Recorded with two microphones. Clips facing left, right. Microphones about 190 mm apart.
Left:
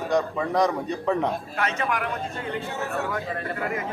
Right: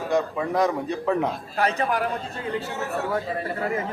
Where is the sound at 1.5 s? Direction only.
35° right (ahead or behind).